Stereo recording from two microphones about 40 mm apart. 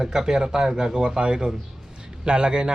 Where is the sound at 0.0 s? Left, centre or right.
Centre.